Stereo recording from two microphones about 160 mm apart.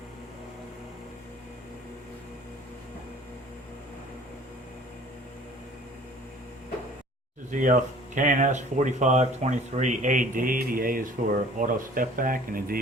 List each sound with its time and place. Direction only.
7.5 s speech: 55° right (ahead or behind)